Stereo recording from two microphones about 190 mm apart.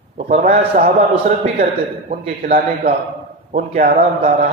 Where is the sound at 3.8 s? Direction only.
55° right (ahead or behind).